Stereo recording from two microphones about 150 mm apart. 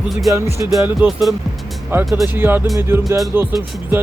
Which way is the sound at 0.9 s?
Centre (ahead or behind).